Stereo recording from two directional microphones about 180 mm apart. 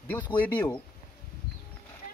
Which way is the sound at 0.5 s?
10° left (ahead or behind).